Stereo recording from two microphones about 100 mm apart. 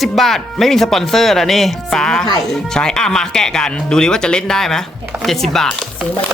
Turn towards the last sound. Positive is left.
turn(degrees=5)  # may be behind; listen again after turning